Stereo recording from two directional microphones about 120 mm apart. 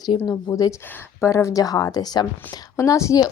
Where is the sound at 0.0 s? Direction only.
30° left (ahead or behind).